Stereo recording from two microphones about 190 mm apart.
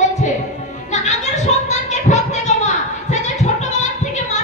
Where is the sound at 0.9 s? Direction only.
35° left (ahead or behind).